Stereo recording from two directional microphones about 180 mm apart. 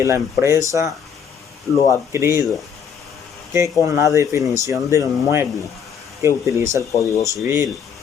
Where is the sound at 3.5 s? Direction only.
15° right (ahead or behind).